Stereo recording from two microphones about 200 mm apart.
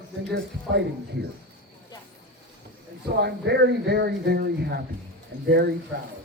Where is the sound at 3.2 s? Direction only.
55° right (ahead or behind).